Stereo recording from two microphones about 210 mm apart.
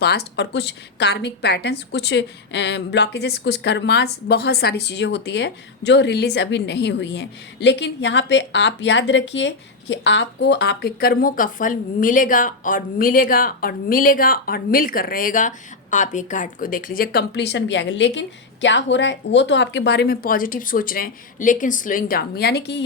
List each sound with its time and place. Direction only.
0.0 s a woman's voice: 50° left (ahead or behind)